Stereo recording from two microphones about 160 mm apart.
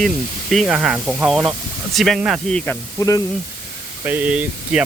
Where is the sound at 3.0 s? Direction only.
20° left (ahead or behind).